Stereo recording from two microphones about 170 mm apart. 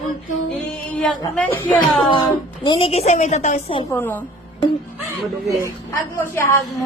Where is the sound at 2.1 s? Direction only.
25° left (ahead or behind); by 3.8 s 40° left (ahead or behind).